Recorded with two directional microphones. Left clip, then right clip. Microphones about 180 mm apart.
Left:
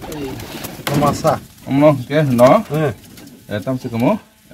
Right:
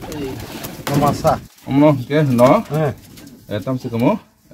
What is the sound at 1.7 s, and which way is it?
Speech, 45° right (ahead or behind).